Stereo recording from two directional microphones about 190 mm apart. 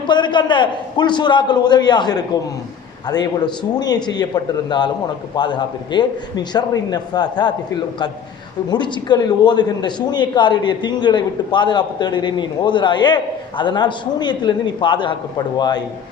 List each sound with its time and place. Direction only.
0.1 s a man's voice: 25° left (ahead or behind)
5.4 s a man's voice: 25° left (ahead or behind)
8.7 s a man's voice: 25° left (ahead or behind)